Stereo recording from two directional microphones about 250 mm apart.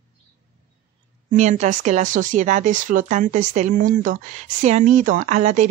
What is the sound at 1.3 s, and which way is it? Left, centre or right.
A woman's voice, right.